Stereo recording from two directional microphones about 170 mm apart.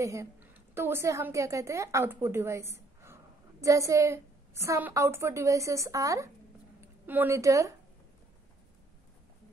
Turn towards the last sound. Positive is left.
turn(degrees=-15)  # may be behind; listen again after turning